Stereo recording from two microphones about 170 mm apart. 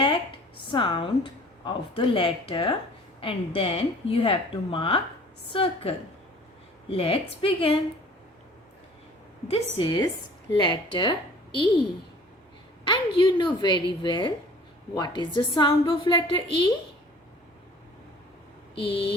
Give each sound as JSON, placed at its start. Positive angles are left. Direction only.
{"t": 0.7, "sound": "a woman's voice", "side_deg": 30}
{"t": 6.9, "sound": "a woman's voice", "side_deg": 35}
{"t": 9.5, "sound": "a woman's voice", "side_deg": 30}
{"t": 18.8, "sound": "a woman's voice", "side_deg": 30}